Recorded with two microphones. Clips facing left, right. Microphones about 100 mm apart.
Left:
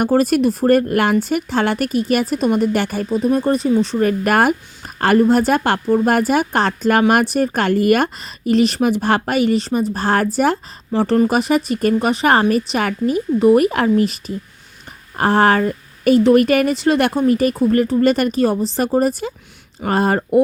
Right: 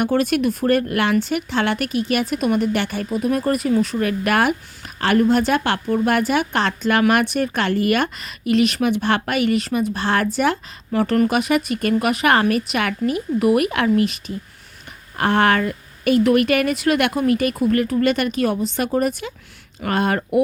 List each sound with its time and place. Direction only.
0.0 s a woman's voice: 40° left (ahead or behind)
3.0 s speech: 30° left (ahead or behind)
4.0 s a woman's voice: 40° left (ahead or behind)